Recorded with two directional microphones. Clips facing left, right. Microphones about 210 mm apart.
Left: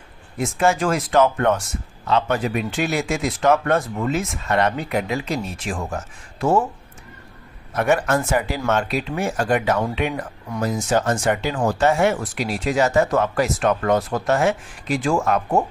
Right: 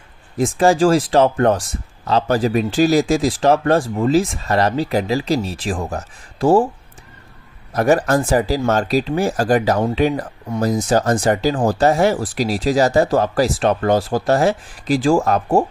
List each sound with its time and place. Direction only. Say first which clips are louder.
0.4 s speech: right 6 dB; 35° right (ahead or behind)
7.7 s speech: right 4 dB; 35° right (ahead or behind)